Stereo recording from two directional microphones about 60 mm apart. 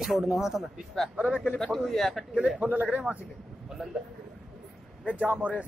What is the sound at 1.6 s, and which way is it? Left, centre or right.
Speech, centre.